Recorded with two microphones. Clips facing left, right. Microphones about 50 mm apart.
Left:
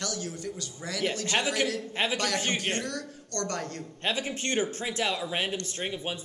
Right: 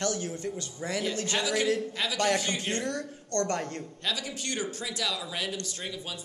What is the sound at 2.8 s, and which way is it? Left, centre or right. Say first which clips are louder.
A woman's voice: right 2 dB; right.